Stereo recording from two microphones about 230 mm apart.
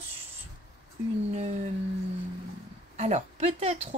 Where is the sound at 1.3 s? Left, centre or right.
Right.